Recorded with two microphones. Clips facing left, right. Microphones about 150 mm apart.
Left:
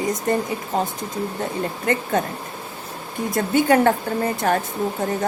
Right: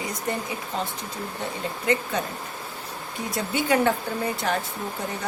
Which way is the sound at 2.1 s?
50° left (ahead or behind).